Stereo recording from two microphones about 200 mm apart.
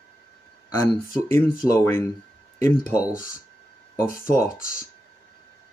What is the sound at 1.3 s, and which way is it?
Speech, 15° left (ahead or behind).